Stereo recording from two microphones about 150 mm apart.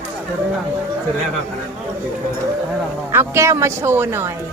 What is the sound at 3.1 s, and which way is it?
Speech, 15° right (ahead or behind).